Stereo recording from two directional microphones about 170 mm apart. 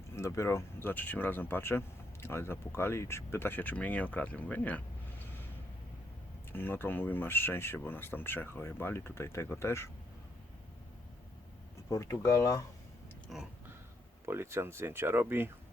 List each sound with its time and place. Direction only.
0.2 s speech: 15° left (ahead or behind)
6.5 s speech: 10° left (ahead or behind)
11.9 s speech: 20° left (ahead or behind)
13.2 s speech: centre (ahead or behind)
14.3 s speech: 15° right (ahead or behind)